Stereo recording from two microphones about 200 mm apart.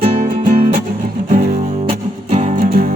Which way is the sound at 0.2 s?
45° right (ahead or behind).